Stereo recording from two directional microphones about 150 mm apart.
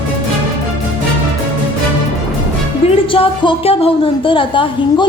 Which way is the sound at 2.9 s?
35° left (ahead or behind).